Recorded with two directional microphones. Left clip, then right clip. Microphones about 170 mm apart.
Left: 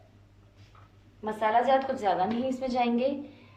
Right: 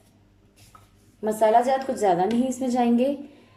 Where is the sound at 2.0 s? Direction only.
45° right (ahead or behind).